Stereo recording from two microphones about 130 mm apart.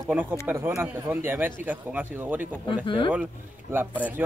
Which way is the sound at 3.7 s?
15° right (ahead or behind).